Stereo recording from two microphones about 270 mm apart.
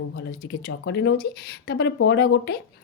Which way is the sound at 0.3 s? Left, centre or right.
Left.